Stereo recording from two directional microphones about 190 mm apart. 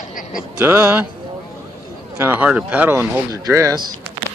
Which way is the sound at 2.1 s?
10° right (ahead or behind).